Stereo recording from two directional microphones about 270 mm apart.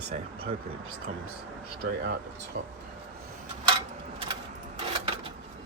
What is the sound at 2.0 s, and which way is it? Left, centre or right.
Speech, right.